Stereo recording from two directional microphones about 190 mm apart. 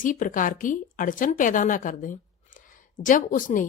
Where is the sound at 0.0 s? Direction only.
45° left (ahead or behind).